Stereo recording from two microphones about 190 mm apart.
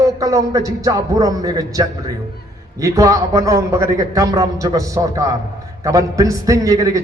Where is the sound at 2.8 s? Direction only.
15° right (ahead or behind).